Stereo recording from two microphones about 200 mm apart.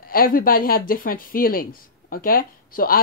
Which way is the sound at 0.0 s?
45° left (ahead or behind).